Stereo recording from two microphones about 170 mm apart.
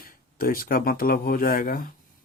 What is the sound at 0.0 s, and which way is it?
Speech, 60° left (ahead or behind).